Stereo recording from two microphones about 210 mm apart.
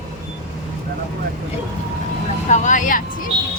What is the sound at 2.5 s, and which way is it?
Speech, 35° left (ahead or behind).